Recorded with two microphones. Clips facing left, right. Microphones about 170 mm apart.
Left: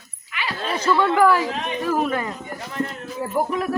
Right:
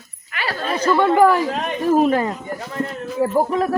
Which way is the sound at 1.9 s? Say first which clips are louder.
Right 8 dB; 35° right (ahead or behind).